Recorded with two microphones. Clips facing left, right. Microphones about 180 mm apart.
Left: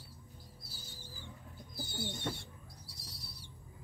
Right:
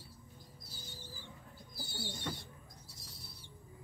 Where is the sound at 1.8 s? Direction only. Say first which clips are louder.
Left 4 dB; 20° left (ahead or behind).